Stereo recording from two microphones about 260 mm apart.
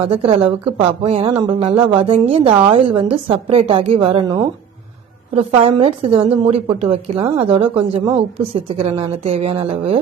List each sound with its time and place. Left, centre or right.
0.0 s a woman's voice: right